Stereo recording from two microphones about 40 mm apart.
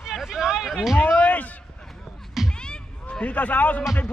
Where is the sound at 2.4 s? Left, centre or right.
Left.